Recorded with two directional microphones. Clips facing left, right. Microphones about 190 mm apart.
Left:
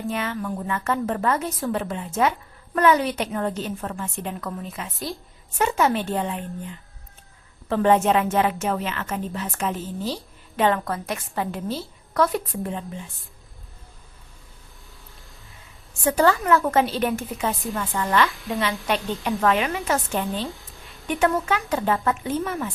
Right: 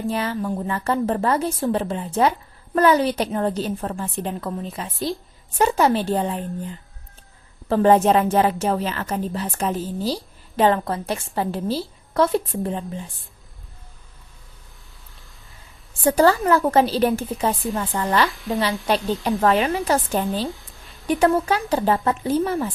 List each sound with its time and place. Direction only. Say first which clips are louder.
0.1 s a woman's voice: right 3 dB; 35° right (ahead or behind)
16.0 s a woman's voice: right 3 dB; 35° right (ahead or behind)
18.3 s speech: right 3 dB; centre (ahead or behind)
18.9 s a woman's voice: right 4 dB; 35° right (ahead or behind)
20.5 s a sound: right 3 dB; centre (ahead or behind)
21.1 s a woman's voice: right 4 dB; 35° right (ahead or behind)